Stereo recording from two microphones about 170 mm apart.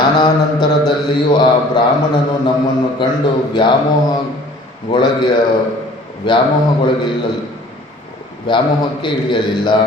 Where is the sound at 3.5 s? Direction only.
25° left (ahead or behind).